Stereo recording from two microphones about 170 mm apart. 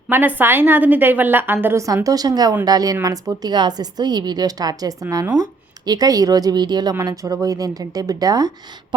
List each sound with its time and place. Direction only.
0.1 s a woman's voice: 10° right (ahead or behind)